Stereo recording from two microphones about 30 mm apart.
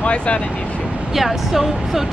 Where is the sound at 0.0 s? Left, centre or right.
Left.